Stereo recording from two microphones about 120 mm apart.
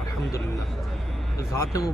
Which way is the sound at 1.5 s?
25° left (ahead or behind).